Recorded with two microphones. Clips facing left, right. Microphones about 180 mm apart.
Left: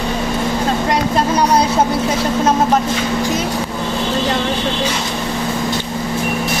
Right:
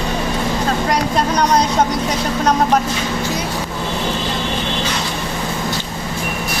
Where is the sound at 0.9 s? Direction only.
5° left (ahead or behind).